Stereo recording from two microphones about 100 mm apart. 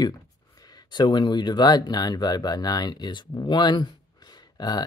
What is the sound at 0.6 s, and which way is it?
Speech, 40° left (ahead or behind).